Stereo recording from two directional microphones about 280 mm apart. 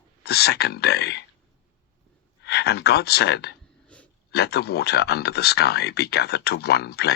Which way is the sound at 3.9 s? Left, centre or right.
Centre.